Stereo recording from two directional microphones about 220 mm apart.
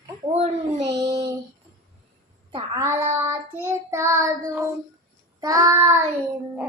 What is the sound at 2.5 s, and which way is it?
Child singing, 15° right (ahead or behind).